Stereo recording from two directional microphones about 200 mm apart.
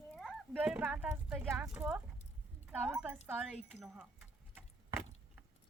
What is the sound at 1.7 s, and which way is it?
Horse, 5° right (ahead or behind).